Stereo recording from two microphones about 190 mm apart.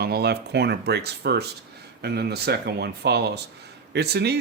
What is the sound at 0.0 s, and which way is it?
Speech, 55° right (ahead or behind).